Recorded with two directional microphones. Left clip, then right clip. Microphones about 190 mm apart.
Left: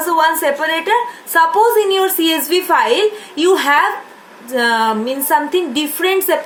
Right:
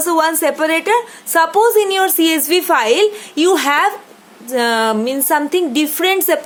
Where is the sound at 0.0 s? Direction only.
40° right (ahead or behind).